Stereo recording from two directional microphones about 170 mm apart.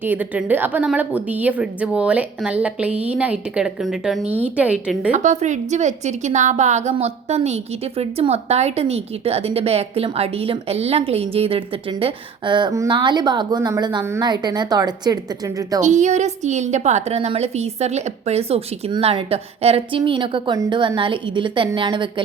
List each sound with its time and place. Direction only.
0.0 s a woman's voice: 10° right (ahead or behind)
5.1 s a woman's voice: 45° right (ahead or behind); by 15.8 s 20° right (ahead or behind)
15.8 s a woman's voice: 45° right (ahead or behind); by 22.1 s 30° right (ahead or behind)